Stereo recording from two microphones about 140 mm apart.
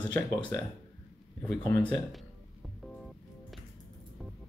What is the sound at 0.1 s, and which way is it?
Speech, 10° left (ahead or behind).